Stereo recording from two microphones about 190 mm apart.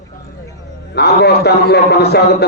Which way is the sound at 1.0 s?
60° left (ahead or behind).